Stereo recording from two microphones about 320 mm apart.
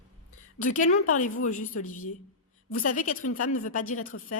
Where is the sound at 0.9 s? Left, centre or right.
Left.